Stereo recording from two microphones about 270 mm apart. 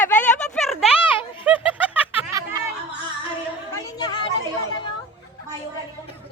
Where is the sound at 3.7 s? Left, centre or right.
Centre.